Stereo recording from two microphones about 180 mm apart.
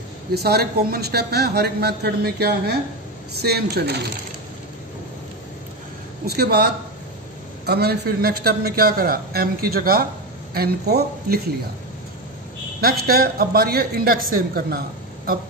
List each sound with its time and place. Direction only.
0.3 s speech: 60° right (ahead or behind)
6.2 s speech: 60° right (ahead or behind)
12.8 s speech: 55° right (ahead or behind)